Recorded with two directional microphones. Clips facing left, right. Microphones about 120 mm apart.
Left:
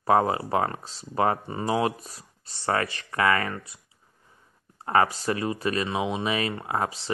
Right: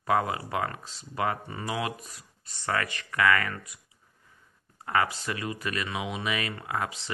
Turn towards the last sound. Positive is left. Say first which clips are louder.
# left 4 dB
turn(degrees=35)  # may be behind; listen again after turning